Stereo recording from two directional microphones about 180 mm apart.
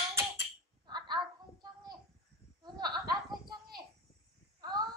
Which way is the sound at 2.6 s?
20° right (ahead or behind).